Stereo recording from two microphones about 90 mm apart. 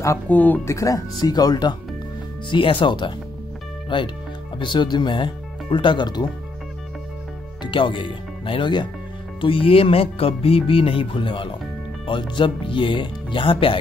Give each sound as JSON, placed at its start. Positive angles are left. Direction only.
{"t": 0.3, "sound": "speech", "side_deg": 20}
{"t": 0.7, "sound": "speech", "side_deg": 35}
{"t": 2.5, "sound": "speech", "side_deg": 70}
{"t": 7.6, "sound": "speech", "side_deg": 65}
{"t": 9.4, "sound": "speech", "side_deg": 85}